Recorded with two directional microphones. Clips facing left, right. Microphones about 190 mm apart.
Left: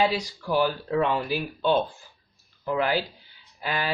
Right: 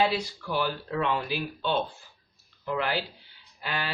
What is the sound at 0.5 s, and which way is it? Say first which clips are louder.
Speech: left 6 dB; 45° left (ahead or behind).